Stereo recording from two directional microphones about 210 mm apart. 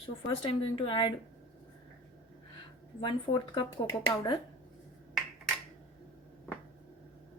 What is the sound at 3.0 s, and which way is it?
Speech, 25° left (ahead or behind).